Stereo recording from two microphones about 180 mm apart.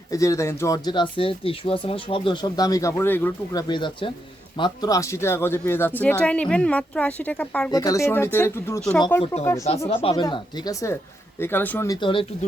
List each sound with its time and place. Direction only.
0.1 s speech: 15° left (ahead or behind)
7.7 s speech: 20° left (ahead or behind)
9.9 s speech: 30° left (ahead or behind); by 11.9 s 10° left (ahead or behind)
11.9 s speech: 25° left (ahead or behind)